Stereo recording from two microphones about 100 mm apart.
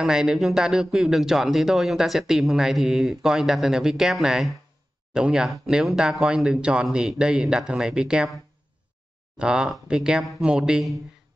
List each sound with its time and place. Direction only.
0.0 s speech: 5° right (ahead or behind)
9.4 s speech: 10° right (ahead or behind)